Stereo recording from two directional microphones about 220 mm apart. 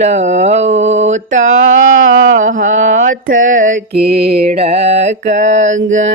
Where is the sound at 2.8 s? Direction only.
60° right (ahead or behind).